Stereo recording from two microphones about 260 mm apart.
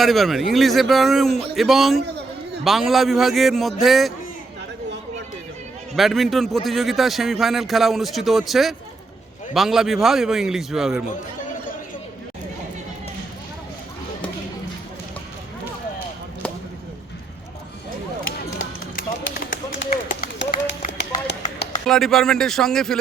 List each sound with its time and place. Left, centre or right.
0.0 s a man's voice: centre
6.0 s a man's voice: centre
19.8 s run: left
21.4 s a sound: left
21.8 s a man's voice: centre